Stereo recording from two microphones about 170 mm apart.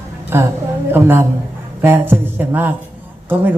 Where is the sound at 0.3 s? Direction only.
15° right (ahead or behind).